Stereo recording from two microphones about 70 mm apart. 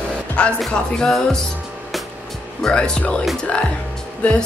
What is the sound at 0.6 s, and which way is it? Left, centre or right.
Music, centre.